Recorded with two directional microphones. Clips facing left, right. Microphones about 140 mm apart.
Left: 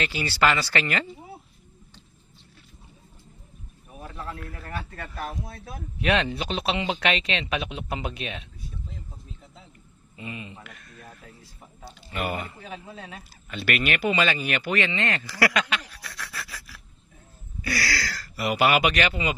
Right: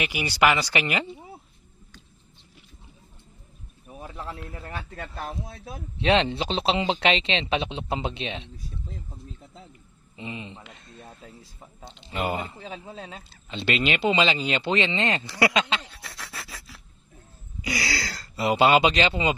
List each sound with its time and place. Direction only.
0.0 s speech: 15° right (ahead or behind)
4.0 s a man's voice: 20° right (ahead or behind)
10.1 s a sound: 25° right (ahead or behind)
11.8 s a man's voice: 20° right (ahead or behind)